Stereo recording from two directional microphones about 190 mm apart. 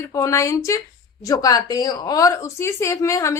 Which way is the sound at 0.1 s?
15° left (ahead or behind).